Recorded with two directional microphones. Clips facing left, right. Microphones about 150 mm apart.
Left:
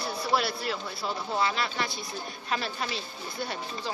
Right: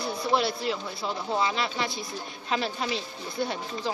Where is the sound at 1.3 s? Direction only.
20° right (ahead or behind).